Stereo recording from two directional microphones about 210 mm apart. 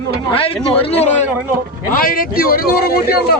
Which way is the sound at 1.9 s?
40° left (ahead or behind).